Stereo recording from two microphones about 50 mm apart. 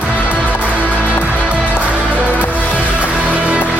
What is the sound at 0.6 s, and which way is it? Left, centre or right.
Music, right.